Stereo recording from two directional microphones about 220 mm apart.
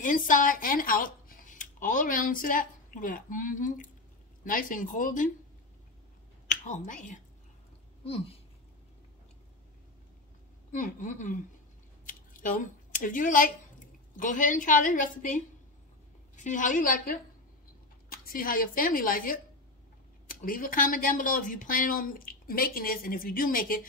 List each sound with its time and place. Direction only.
0.0 s speech: 35° left (ahead or behind)
6.5 s speech: 35° left (ahead or behind)
10.7 s speech: 35° left (ahead or behind)
12.1 s a sound: 35° left (ahead or behind)
14.1 s speech: 35° left (ahead or behind)